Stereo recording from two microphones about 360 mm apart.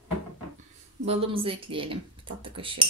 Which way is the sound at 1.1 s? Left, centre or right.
Centre.